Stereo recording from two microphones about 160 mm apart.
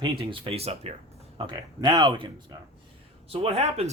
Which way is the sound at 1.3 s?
30° right (ahead or behind).